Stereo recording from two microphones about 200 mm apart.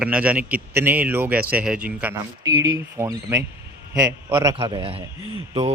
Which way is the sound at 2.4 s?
20° right (ahead or behind).